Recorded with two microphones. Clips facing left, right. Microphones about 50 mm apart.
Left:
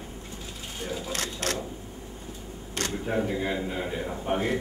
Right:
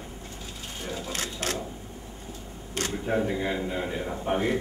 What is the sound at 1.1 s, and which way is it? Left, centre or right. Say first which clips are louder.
Speech: even; centre.